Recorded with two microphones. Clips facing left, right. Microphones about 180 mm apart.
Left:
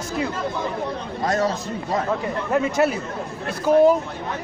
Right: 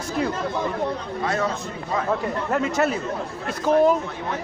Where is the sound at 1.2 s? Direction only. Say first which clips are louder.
Left 4 dB; 40° left (ahead or behind).